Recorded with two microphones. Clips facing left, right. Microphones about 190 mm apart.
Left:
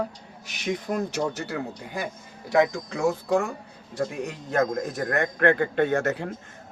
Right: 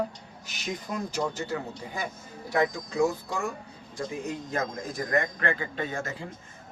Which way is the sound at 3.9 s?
65° left (ahead or behind).